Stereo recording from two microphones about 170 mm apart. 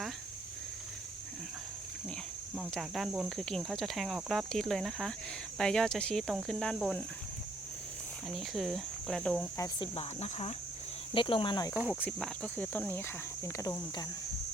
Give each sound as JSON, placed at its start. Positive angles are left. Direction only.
{"t": 2.6, "sound": "speech", "side_deg": 0}
{"t": 8.3, "sound": "speech", "side_deg": 0}
{"t": 9.8, "sound": "speech", "side_deg": 35}
{"t": 11.1, "sound": "speech", "side_deg": 30}
{"t": 11.7, "sound": "speech", "side_deg": -10}
{"t": 11.9, "sound": "speech", "side_deg": 10}